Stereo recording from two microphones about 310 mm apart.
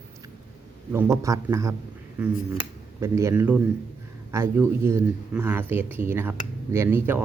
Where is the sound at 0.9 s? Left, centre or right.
Centre.